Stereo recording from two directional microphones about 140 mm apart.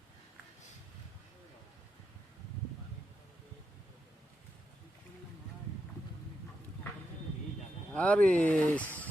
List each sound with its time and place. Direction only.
7.9 s speech: 10° left (ahead or behind)